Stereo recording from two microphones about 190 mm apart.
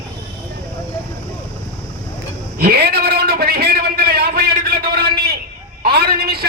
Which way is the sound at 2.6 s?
55° right (ahead or behind).